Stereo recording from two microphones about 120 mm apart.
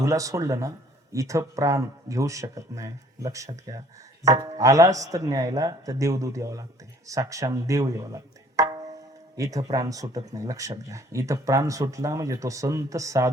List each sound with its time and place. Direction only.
0.0 s speech: 25° right (ahead or behind)